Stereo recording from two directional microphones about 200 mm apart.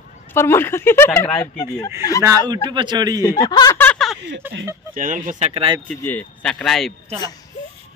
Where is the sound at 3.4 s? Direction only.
20° left (ahead or behind); by 4.2 s centre (ahead or behind).